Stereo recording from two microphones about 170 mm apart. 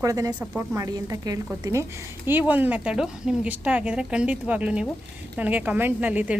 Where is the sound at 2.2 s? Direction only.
10° right (ahead or behind).